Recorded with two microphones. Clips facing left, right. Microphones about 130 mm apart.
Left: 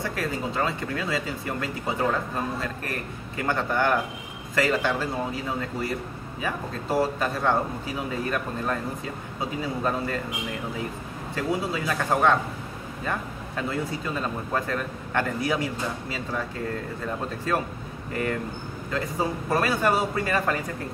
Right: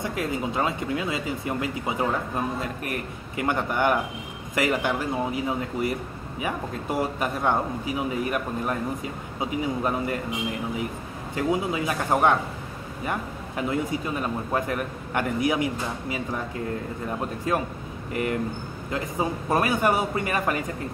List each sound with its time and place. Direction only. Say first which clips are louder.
0.0 s a man's voice: right 1 dB; 20° right (ahead or behind)
11.3 s a man's voice: right 2 dB; 20° right (ahead or behind)
13.6 s a man's voice: right 3 dB; 15° right (ahead or behind)
18.1 s a man's voice: right 2 dB; 15° right (ahead or behind)